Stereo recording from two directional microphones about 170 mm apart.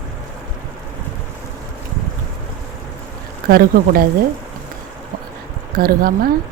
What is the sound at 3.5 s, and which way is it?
Speech, 60° right (ahead or behind).